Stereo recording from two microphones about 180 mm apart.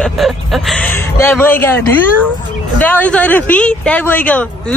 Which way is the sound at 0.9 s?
15° left (ahead or behind).